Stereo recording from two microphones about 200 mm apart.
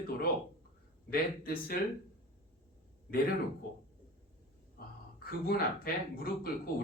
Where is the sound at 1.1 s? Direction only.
50° left (ahead or behind).